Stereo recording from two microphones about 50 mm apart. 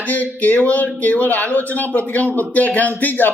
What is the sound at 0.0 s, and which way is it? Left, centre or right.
Speech, left.